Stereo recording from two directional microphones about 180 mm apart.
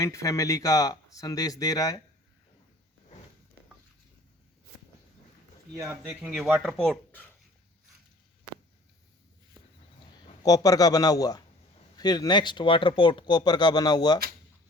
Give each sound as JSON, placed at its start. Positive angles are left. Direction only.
{"t": 0.0, "sound": "speech", "side_deg": 15}
{"t": 5.7, "sound": "speech", "side_deg": -15}
{"t": 6.1, "sound": "speech", "side_deg": -5}
{"t": 10.4, "sound": "speech", "side_deg": 20}